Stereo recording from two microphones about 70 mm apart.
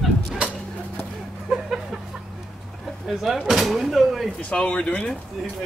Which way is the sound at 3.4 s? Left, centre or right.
Centre.